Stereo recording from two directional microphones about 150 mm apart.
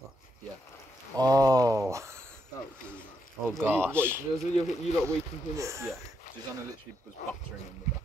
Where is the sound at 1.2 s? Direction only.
25° right (ahead or behind).